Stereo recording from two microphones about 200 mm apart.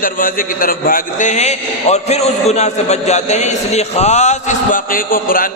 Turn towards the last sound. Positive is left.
turn(degrees=45)  # may be behind; listen again after turning